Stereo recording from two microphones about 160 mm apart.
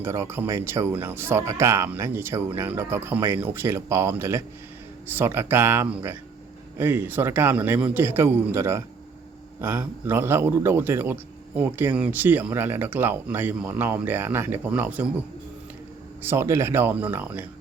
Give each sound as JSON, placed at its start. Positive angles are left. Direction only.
{"t": 0.0, "sound": "a man's voice", "side_deg": -15}
{"t": 16.2, "sound": "a man's voice", "side_deg": -15}